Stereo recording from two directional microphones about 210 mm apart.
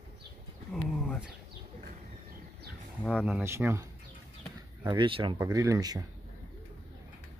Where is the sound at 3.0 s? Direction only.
5° right (ahead or behind).